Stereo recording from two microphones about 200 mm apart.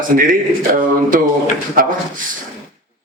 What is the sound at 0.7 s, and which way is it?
Speech, 45° right (ahead or behind).